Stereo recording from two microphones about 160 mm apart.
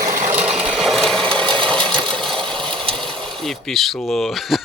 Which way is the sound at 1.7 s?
5° left (ahead or behind).